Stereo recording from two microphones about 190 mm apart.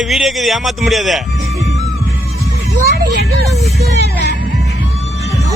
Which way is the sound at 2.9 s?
55° right (ahead or behind).